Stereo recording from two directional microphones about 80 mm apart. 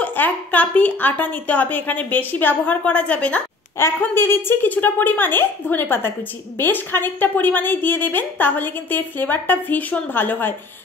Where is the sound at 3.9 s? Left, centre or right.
Left.